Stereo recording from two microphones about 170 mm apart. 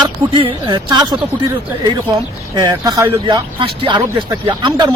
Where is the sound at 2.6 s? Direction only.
20° right (ahead or behind).